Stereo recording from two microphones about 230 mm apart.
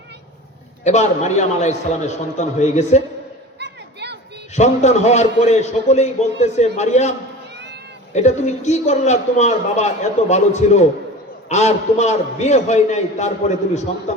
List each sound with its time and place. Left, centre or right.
0.9 s a man's voice: left
3.6 s a sound: right
4.5 s a man's voice: left
7.5 s cat: right
8.1 s a man's voice: left